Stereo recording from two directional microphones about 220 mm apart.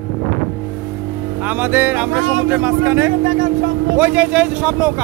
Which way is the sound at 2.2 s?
55° right (ahead or behind).